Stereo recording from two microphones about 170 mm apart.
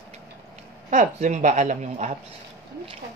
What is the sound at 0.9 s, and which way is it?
A woman's voice, 45° right (ahead or behind).